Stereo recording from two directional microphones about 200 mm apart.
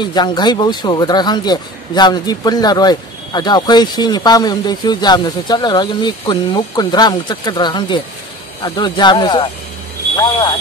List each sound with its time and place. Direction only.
0.0 s speech: 20° left (ahead or behind)